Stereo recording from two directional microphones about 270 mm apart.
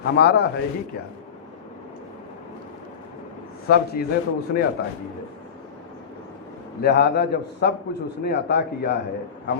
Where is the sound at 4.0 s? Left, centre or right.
Left.